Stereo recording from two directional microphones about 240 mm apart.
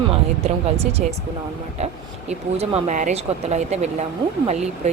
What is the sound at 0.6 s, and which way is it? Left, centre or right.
Speech, right.